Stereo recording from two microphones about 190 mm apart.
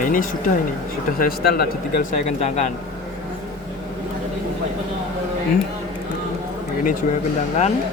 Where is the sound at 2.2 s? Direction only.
35° left (ahead or behind).